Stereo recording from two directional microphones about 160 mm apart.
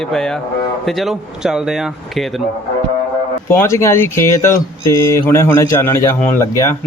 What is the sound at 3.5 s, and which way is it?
Speech, 15° left (ahead or behind).